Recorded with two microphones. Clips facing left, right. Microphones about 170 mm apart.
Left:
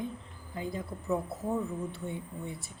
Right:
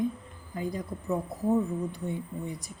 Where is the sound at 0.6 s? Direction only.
40° right (ahead or behind).